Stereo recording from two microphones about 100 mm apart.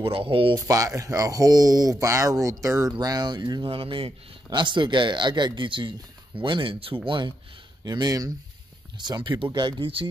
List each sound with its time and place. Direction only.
0.0 s speech: 65° right (ahead or behind)
0.6 s speech: 35° right (ahead or behind)
3.7 s speech: 65° right (ahead or behind)
7.1 s speech: 50° right (ahead or behind)